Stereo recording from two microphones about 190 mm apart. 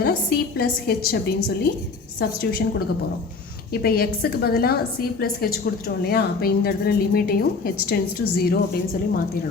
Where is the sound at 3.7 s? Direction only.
55° left (ahead or behind).